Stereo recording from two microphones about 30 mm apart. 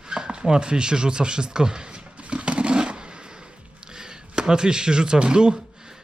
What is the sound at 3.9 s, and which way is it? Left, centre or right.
Speech, right.